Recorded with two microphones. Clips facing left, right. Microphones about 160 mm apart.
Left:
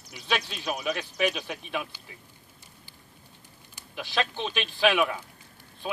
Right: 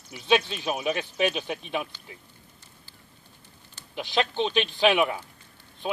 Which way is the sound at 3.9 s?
20° right (ahead or behind).